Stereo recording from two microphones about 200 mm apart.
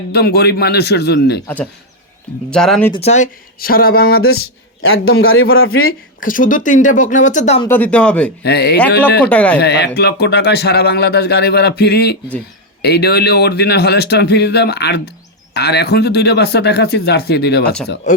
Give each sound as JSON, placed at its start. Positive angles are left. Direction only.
{"t": 0.1, "sound": "speech", "side_deg": 55}
{"t": 2.5, "sound": "speech", "side_deg": 5}
{"t": 2.9, "sound": "speech", "side_deg": 35}
{"t": 3.6, "sound": "a sound", "side_deg": 45}
{"t": 4.8, "sound": "a man's voice", "side_deg": 90}
{"t": 6.1, "sound": "speech", "side_deg": 40}
{"t": 7.7, "sound": "speech", "side_deg": 5}
{"t": 8.4, "sound": "speech", "side_deg": 55}
{"t": 9.2, "sound": "speech", "side_deg": 5}
{"t": 9.6, "sound": "speech", "side_deg": 55}